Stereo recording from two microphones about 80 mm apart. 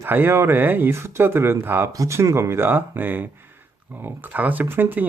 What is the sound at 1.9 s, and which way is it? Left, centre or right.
Speech, right.